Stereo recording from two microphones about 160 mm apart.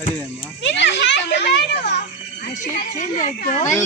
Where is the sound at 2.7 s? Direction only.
50° left (ahead or behind).